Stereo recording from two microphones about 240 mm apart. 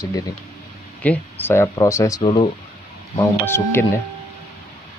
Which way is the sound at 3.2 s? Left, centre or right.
Centre.